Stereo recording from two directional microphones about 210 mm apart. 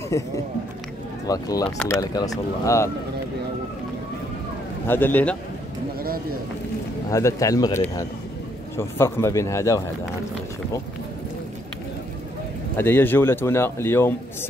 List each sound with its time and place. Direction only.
0.1 s a man's voice: 15° left (ahead or behind)
4.8 s a man's voice: 10° left (ahead or behind)
7.1 s a man's voice: 15° left (ahead or behind)
12.7 s a man's voice: 10° left (ahead or behind)